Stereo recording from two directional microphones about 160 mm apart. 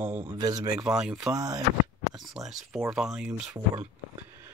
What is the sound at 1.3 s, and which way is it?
Speech, 25° right (ahead or behind).